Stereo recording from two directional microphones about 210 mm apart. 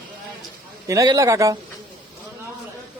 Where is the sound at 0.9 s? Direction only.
15° right (ahead or behind).